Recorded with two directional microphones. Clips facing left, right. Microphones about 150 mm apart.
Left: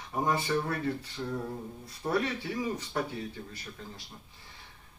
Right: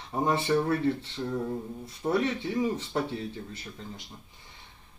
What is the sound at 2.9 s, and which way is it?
Speech, 25° right (ahead or behind).